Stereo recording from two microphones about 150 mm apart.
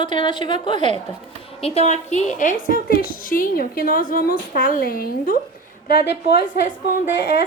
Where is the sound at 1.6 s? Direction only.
45° left (ahead or behind); by 5.3 s 80° left.